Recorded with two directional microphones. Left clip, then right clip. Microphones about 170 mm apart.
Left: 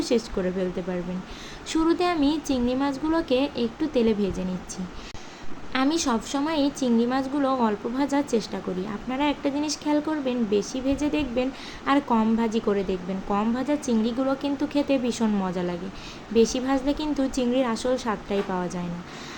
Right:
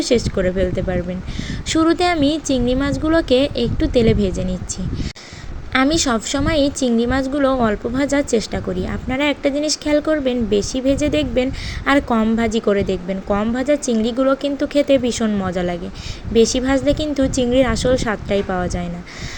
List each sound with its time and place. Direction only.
0.0 s a woman's voice: 20° right (ahead or behind)
5.7 s a woman's voice: 25° right (ahead or behind)